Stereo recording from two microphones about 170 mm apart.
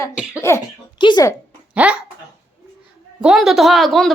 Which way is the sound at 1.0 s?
25° left (ahead or behind).